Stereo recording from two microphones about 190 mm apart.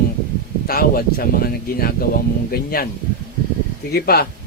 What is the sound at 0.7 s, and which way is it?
Speech, 50° left (ahead or behind).